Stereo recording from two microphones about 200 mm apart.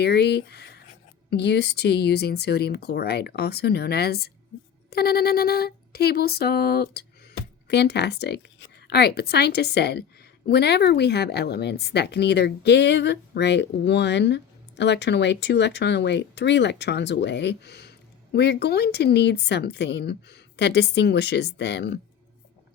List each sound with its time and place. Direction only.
0.0 s speech: 55° left (ahead or behind)
4.9 s a sound: 50° left (ahead or behind)
7.7 s speech: 55° left (ahead or behind)